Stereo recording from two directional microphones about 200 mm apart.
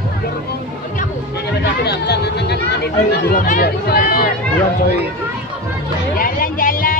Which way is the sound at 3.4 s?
45° left (ahead or behind).